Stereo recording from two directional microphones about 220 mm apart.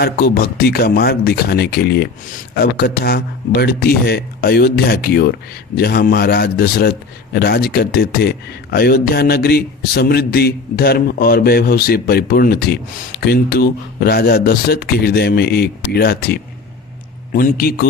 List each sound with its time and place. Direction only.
0.0 s a man's voice: 45° left (ahead or behind)